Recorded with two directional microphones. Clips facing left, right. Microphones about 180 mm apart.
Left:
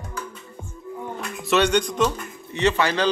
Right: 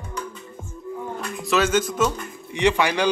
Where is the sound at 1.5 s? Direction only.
Centre (ahead or behind).